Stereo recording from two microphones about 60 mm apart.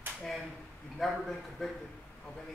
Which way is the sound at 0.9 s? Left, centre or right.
Centre.